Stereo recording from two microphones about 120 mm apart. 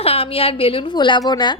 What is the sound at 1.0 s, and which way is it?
Speech, 40° left (ahead or behind).